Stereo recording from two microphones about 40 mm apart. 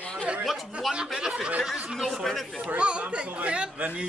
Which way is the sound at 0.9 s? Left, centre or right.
Centre.